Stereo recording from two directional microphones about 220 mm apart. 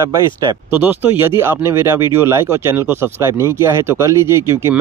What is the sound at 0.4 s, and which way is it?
Speech, 20° right (ahead or behind).